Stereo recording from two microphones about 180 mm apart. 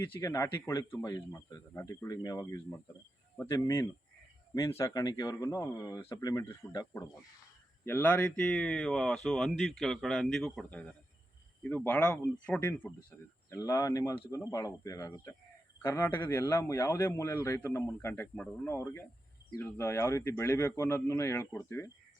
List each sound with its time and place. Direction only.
0.0 s speech: 15° left (ahead or behind)